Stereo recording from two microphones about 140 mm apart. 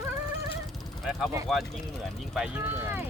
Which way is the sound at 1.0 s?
Centre (ahead or behind).